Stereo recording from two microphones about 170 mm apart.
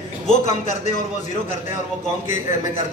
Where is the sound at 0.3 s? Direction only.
45° left (ahead or behind).